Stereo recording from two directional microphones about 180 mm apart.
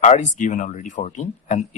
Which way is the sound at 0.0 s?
40° left (ahead or behind).